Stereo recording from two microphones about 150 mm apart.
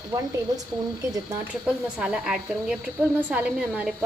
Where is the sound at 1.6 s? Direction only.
5° right (ahead or behind).